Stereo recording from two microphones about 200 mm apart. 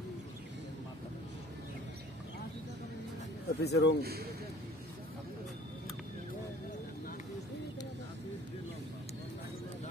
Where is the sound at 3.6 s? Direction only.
55° left (ahead or behind).